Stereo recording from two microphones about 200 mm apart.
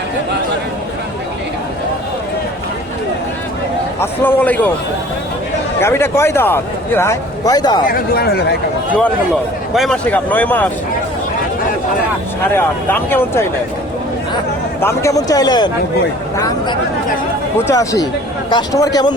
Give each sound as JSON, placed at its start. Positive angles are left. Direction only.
{"t": 4.0, "sound": "a man's voice", "side_deg": 10}
{"t": 5.8, "sound": "a man's voice", "side_deg": 10}
{"t": 7.9, "sound": "speech", "side_deg": 50}
{"t": 8.9, "sound": "a man's voice", "side_deg": 5}
{"t": 12.5, "sound": "a man's voice", "side_deg": 10}
{"t": 14.8, "sound": "a man's voice", "side_deg": 15}